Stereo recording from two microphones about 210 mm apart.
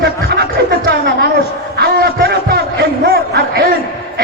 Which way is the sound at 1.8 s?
45° right (ahead or behind).